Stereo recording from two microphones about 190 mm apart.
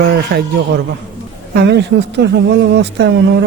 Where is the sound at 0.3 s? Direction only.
55° right (ahead or behind).